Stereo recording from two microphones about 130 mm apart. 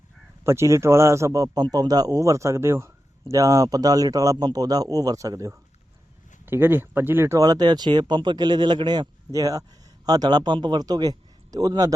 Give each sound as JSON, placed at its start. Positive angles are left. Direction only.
{"t": 0.4, "sound": "a man's voice", "side_deg": -20}